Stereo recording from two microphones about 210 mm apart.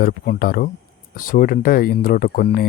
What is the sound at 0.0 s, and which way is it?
Speech, 45° left (ahead or behind).